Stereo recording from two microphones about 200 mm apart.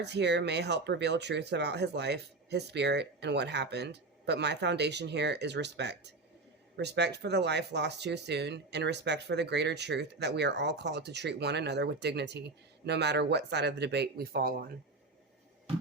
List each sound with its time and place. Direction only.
0.0 s speech: 55° right (ahead or behind)